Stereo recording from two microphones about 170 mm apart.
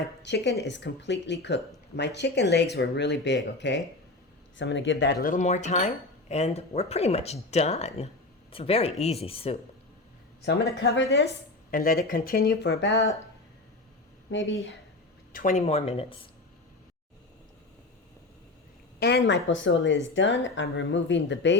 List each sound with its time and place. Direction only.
0.2 s a woman's voice: 90° left
5.3 s speech: 45° left (ahead or behind)
10.4 s a woman's voice: 75° left (ahead or behind)
11.7 s speech: 60° left (ahead or behind); by 13.1 s 90° left
14.3 s speech: 90° left
15.3 s speech: 50° left (ahead or behind); by 16.3 s 30° left (ahead or behind)
18.9 s a woman's voice: 75° left (ahead or behind)